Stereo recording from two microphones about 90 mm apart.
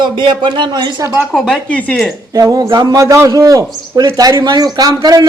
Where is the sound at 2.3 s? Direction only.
40° right (ahead or behind).